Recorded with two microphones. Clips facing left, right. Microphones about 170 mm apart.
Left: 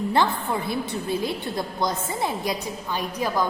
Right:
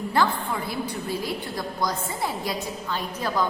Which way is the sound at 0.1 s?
25° left (ahead or behind).